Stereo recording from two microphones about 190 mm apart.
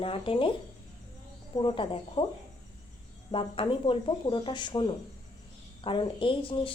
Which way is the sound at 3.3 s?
25° left (ahead or behind).